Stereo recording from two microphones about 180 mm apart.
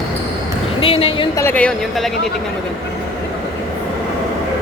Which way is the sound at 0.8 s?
30° left (ahead or behind).